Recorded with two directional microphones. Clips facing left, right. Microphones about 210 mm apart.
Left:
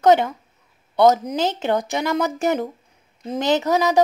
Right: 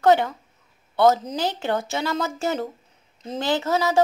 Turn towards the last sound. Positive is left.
turn(degrees=15)  # may be behind; listen again after turning